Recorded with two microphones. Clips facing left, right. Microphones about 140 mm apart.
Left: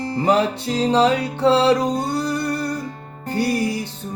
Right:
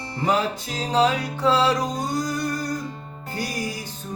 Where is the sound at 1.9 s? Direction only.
65° left (ahead or behind).